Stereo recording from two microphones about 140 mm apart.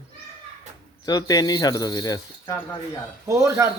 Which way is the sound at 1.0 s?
30° left (ahead or behind).